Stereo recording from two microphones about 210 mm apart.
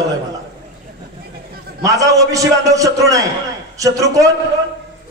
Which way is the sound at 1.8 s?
15° right (ahead or behind).